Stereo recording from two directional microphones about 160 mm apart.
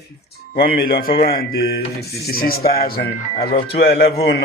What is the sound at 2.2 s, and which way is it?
Speech, 70° left (ahead or behind).